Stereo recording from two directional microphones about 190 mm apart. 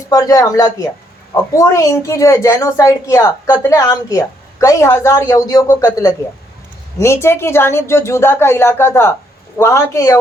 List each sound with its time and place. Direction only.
0.1 s a woman's voice: 20° left (ahead or behind)